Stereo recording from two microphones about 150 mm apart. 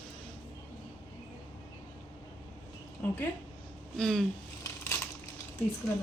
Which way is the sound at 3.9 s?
5° left (ahead or behind).